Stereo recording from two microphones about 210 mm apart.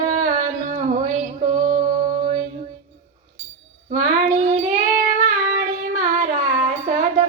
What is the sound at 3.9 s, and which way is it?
Child singing, 40° right (ahead or behind).